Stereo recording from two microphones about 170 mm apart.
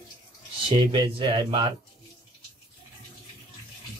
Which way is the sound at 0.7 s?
25° right (ahead or behind).